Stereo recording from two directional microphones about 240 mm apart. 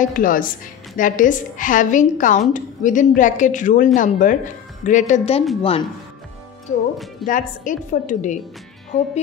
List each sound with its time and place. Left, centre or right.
0.0 s a woman's voice: left